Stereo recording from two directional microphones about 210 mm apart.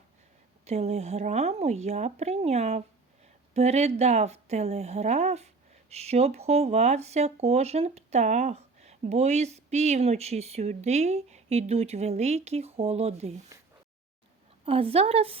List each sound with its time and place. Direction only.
0.6 s speech: 30° right (ahead or behind)
14.6 s speech: 25° right (ahead or behind)